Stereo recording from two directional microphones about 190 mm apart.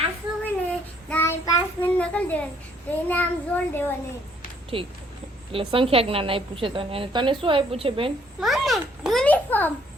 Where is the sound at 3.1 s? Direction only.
10° left (ahead or behind).